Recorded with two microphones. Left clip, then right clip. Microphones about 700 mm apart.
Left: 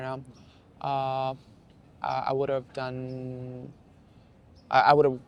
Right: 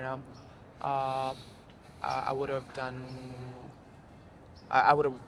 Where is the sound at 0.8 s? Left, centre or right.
Left.